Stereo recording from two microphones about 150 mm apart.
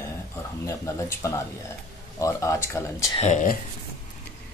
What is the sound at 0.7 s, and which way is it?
Speech, 20° left (ahead or behind).